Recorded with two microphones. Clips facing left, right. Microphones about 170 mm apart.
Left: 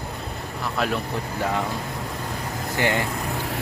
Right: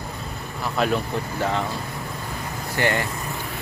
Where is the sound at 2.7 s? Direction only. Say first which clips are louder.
Even; 15° left (ahead or behind).